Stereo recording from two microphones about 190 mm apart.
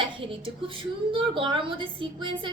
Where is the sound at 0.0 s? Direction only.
25° right (ahead or behind).